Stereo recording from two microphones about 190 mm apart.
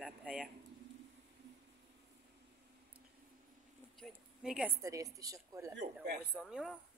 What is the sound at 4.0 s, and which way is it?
Speech, 5° right (ahead or behind).